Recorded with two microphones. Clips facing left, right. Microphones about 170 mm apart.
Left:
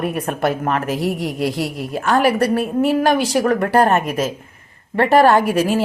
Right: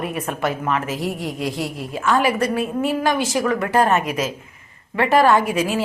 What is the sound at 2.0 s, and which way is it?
A woman's voice, 60° left (ahead or behind).